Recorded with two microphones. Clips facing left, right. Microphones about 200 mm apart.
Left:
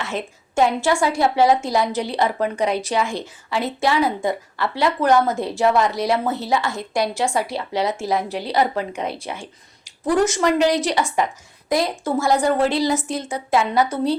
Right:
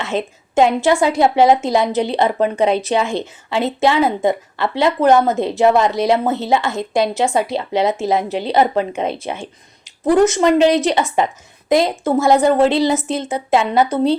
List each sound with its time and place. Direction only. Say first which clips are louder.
0.0 s a woman's voice: right 6 dB; 25° right (ahead or behind)